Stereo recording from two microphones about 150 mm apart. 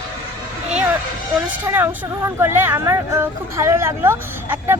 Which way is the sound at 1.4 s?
15° right (ahead or behind).